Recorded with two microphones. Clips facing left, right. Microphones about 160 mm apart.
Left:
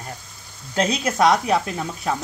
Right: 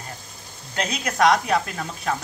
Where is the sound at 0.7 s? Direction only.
35° left (ahead or behind).